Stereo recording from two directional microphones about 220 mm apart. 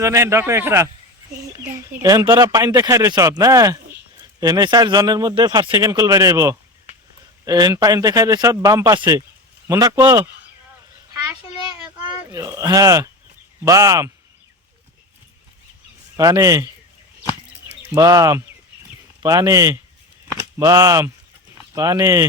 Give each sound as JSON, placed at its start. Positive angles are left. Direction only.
{"t": 0.0, "sound": "a man's voice", "side_deg": -15}
{"t": 12.3, "sound": "a man's voice", "side_deg": -15}
{"t": 16.1, "sound": "a man's voice", "side_deg": -15}
{"t": 17.9, "sound": "a man's voice", "side_deg": -15}